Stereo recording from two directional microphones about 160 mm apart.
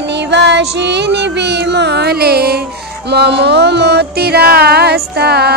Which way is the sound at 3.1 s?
90° right.